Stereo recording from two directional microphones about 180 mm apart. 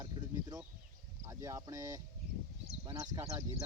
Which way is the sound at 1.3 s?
20° right (ahead or behind).